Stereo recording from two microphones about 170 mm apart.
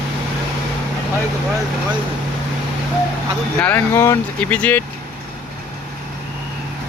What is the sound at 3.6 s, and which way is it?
Speech, 10° left (ahead or behind).